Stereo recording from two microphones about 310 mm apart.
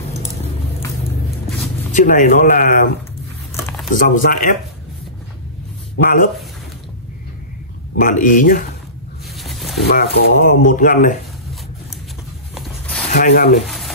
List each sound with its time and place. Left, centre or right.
2.0 s speech: left
3.9 s speech: left
6.0 s speech: left
7.9 s speech: left
9.4 s a sound: centre
9.8 s speech: left
12.5 s a sound: centre
13.1 s speech: left
13.7 s a sound: centre